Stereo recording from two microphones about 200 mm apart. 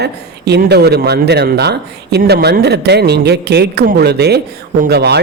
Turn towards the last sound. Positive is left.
turn(degrees=-55)  # may be behind; listen again after turning